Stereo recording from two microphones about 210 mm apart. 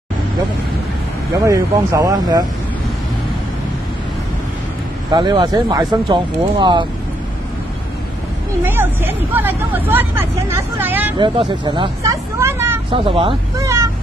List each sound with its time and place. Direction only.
1.3 s speech: 15° right (ahead or behind)
5.1 s speech: 20° right (ahead or behind)
8.6 s speech: 10° right (ahead or behind)
11.1 s speech: 20° right (ahead or behind)
12.9 s speech: 25° right (ahead or behind)